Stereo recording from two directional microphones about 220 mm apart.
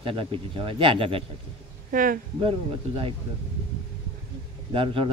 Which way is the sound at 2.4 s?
25° right (ahead or behind).